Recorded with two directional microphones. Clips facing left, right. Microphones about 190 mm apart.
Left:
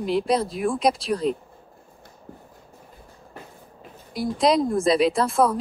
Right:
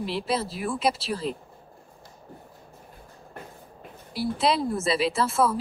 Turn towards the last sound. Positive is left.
turn(degrees=-5)  # may be behind; listen again after turning